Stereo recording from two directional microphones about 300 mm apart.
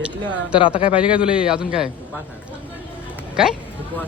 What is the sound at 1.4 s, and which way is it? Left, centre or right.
Speech, centre.